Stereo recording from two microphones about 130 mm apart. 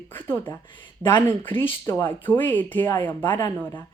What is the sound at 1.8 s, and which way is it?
Speech, 25° left (ahead or behind).